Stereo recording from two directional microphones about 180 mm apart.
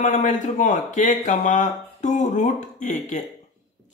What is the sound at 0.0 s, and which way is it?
Speech, 40° left (ahead or behind).